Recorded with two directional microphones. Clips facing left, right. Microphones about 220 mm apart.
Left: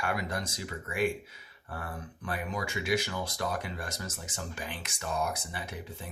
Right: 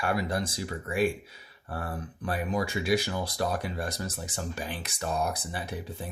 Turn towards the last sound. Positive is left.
turn(degrees=-35)  # may be behind; listen again after turning